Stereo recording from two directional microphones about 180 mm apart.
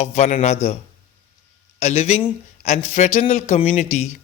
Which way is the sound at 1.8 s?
35° left (ahead or behind).